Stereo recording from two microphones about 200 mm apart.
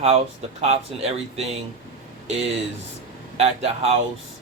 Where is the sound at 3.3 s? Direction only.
30° right (ahead or behind).